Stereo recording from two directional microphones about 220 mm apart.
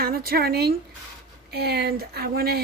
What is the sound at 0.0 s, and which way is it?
Speech, 40° right (ahead or behind).